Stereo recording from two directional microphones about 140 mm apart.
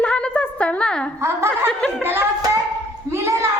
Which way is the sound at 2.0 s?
15° right (ahead or behind).